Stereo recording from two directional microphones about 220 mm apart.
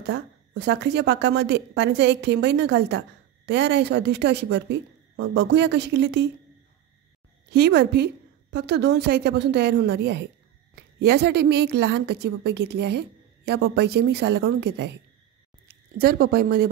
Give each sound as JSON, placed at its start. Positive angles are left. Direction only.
{"t": 0.0, "sound": "a woman's voice", "side_deg": -50}
{"t": 7.5, "sound": "a woman's voice", "side_deg": -50}